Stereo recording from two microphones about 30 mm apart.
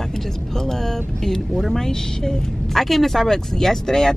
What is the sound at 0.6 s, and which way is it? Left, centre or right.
Speech, centre.